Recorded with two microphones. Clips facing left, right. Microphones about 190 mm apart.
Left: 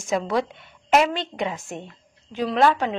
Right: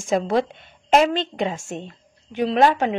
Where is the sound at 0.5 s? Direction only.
25° right (ahead or behind).